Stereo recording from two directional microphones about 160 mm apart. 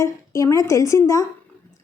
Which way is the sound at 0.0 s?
20° left (ahead or behind).